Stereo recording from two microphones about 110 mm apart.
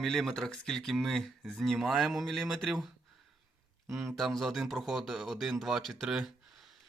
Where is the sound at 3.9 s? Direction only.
25° right (ahead or behind).